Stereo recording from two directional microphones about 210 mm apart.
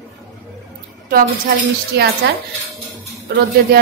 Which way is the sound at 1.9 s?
50° right (ahead or behind).